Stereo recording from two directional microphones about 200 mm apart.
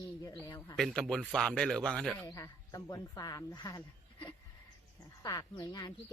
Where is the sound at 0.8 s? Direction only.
Centre (ahead or behind).